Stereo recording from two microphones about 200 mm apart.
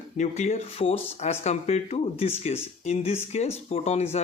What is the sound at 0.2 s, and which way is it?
Speech, 35° left (ahead or behind).